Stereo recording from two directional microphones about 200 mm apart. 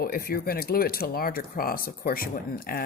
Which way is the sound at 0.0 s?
45° left (ahead or behind).